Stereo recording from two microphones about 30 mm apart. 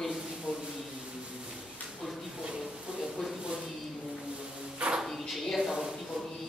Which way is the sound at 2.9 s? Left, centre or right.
Right.